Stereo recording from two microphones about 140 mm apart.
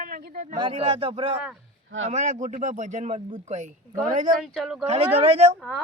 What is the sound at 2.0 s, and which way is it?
Speech, 55° right (ahead or behind).